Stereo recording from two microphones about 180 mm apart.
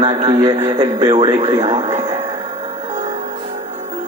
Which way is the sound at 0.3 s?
25° right (ahead or behind).